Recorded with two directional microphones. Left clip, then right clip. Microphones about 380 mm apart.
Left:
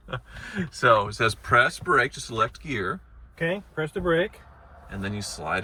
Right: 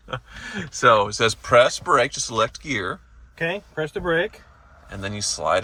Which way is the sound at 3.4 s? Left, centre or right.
Right.